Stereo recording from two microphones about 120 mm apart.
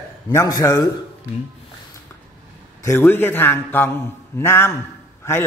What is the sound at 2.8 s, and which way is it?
A man's voice, 20° left (ahead or behind).